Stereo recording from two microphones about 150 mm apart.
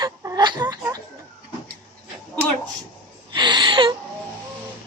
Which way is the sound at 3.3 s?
30° right (ahead or behind).